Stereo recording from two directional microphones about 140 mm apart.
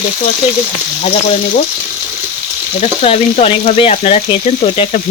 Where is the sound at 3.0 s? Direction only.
45° left (ahead or behind).